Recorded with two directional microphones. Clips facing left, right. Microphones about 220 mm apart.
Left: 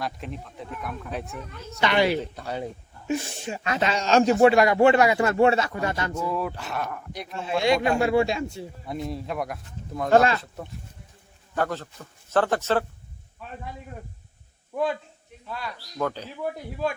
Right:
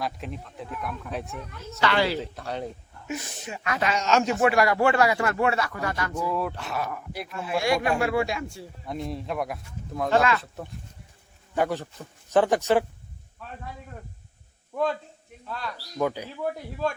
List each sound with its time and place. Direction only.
0.0 s speech: centre (ahead or behind)
1.8 s speech: 20° left (ahead or behind)
2.2 s speech: centre (ahead or behind)
3.1 s speech: 30° left (ahead or behind)
6.2 s speech: centre (ahead or behind)
7.3 s speech: 25° left (ahead or behind)
8.9 s speech: centre (ahead or behind)
10.1 s speech: 40° left (ahead or behind)
10.4 s speech: centre (ahead or behind)
11.5 s speech: 15° right (ahead or behind)
16.0 s speech: 10° right (ahead or behind)
16.4 s speech: 5° left (ahead or behind)